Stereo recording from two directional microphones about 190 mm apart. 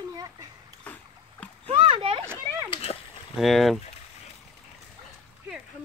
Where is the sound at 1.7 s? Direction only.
30° right (ahead or behind).